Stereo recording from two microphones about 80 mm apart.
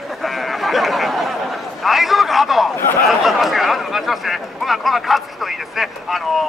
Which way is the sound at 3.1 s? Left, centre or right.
Centre.